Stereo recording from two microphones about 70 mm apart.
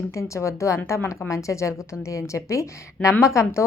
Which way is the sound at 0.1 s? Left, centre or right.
Left.